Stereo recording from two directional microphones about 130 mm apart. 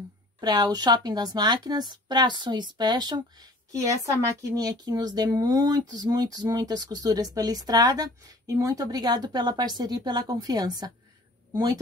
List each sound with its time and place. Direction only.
0.4 s a woman's voice: 30° right (ahead or behind)